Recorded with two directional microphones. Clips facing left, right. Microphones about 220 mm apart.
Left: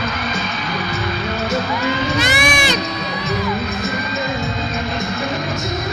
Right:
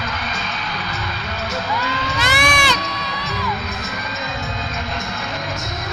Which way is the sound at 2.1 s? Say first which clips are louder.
Left 3 dB; 20° left (ahead or behind).